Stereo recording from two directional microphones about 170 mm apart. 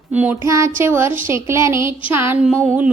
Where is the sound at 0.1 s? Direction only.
10° right (ahead or behind).